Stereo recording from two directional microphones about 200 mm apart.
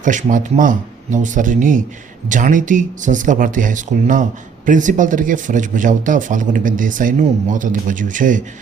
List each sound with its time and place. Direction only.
0.0 s speech: 40° right (ahead or behind)